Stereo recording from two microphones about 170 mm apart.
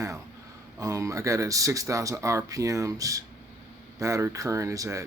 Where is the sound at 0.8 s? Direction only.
20° right (ahead or behind).